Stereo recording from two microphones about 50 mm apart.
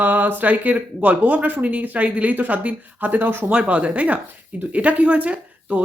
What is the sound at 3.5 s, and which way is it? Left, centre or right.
Speech, right.